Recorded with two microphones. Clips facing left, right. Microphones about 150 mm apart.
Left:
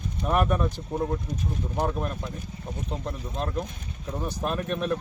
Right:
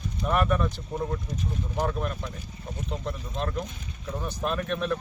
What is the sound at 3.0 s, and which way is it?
Speech, 10° left (ahead or behind).